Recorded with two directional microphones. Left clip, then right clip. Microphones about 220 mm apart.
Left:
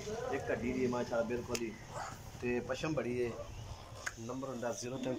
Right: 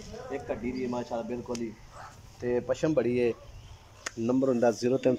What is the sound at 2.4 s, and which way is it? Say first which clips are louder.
Speech: right 9 dB; 35° right (ahead or behind).